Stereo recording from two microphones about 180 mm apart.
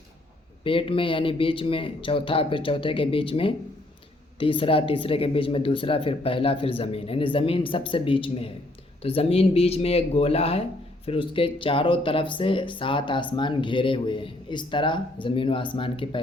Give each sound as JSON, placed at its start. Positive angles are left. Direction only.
{"t": 0.6, "sound": "speech", "side_deg": 30}